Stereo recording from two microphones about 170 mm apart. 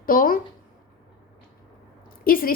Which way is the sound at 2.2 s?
60° left (ahead or behind).